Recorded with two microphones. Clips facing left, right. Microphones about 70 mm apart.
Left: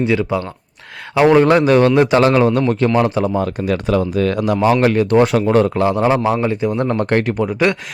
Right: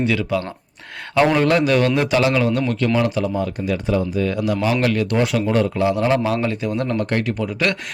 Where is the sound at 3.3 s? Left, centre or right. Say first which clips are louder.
Left 4 dB; left.